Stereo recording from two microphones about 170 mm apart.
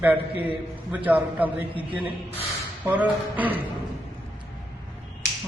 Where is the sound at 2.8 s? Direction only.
10° right (ahead or behind).